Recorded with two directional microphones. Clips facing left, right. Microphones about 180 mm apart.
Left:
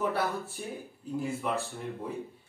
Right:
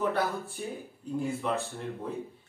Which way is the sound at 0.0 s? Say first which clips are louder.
Right 1 dB; centre (ahead or behind).